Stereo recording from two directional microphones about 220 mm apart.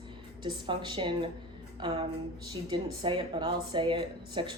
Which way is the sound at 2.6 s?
20° right (ahead or behind).